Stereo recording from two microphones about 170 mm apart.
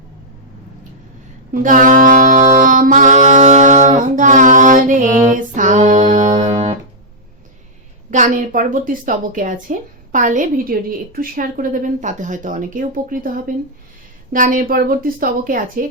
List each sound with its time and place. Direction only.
1.6 s saxophone: 50° right (ahead or behind)
8.1 s a woman's voice: 50° right (ahead or behind)